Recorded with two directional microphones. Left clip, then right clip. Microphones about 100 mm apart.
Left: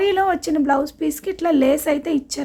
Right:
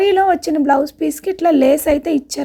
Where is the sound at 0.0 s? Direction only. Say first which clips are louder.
Right 5 dB; 40° right (ahead or behind).